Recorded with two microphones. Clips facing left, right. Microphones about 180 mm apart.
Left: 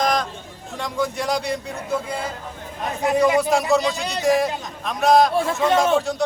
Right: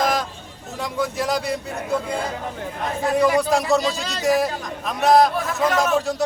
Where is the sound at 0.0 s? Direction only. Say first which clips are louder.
Even; 5° right (ahead or behind).